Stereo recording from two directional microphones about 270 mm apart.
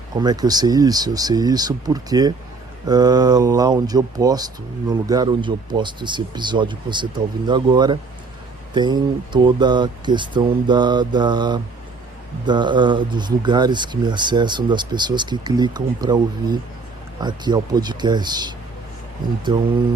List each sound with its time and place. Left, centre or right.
0.2 s speech: centre